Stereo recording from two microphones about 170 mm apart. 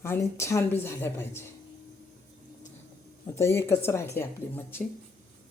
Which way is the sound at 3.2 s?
15° left (ahead or behind).